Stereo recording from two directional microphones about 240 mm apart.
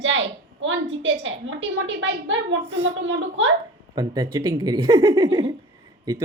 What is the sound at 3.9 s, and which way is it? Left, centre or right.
Speech, centre.